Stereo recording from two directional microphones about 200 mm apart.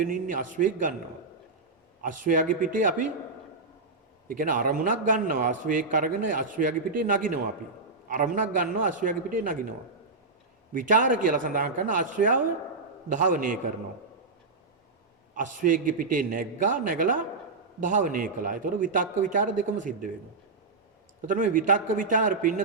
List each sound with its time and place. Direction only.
0.0 s a man's voice: 40° right (ahead or behind)
2.0 s a man's voice: 40° right (ahead or behind)
4.3 s a man's voice: 45° right (ahead or behind)
10.8 s a man's voice: 40° right (ahead or behind)
15.4 s a man's voice: 40° right (ahead or behind)
21.2 s a man's voice: 40° right (ahead or behind)